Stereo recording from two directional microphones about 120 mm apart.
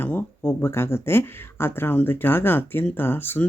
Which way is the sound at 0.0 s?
15° left (ahead or behind).